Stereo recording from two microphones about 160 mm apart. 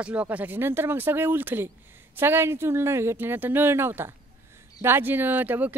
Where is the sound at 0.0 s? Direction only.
10° right (ahead or behind).